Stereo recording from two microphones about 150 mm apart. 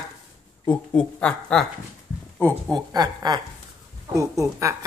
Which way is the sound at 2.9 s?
25° right (ahead or behind).